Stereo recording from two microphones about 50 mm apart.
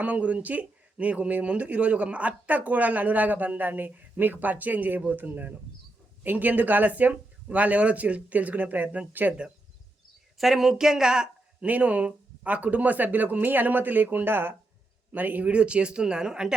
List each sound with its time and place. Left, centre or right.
0.0 s speech: right
10.3 s speech: centre
11.6 s speech: right
15.1 s a man's voice: right; by 16.6 s centre